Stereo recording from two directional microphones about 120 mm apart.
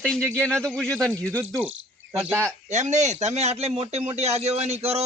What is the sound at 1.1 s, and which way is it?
Speech, 20° right (ahead or behind).